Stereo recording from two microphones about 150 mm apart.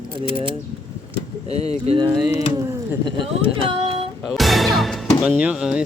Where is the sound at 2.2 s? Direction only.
20° right (ahead or behind).